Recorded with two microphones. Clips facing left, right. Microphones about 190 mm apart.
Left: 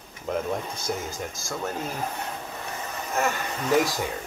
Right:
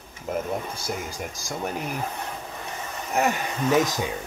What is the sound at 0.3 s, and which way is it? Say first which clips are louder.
Speech: even; 5° right (ahead or behind).